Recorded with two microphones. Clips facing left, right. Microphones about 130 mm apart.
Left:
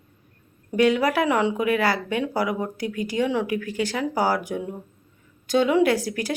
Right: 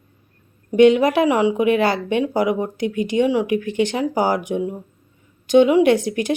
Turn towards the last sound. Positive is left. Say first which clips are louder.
# right 6 dB
turn(degrees=-20)  # may be behind; listen again after turning